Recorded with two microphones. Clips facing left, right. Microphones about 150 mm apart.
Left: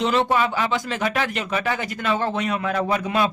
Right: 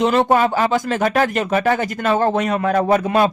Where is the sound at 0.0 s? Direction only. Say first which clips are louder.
Right 5 dB; 50° right (ahead or behind).